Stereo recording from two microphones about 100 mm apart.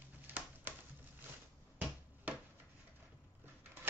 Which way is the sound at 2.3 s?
15° right (ahead or behind).